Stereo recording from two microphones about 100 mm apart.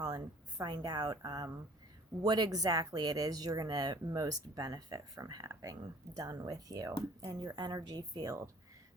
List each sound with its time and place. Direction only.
0.0 s speech: 40° right (ahead or behind)
2.2 s speech: 45° right (ahead or behind)